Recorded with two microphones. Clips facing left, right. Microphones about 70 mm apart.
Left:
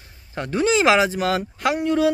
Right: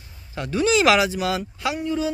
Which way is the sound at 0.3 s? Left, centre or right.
Left.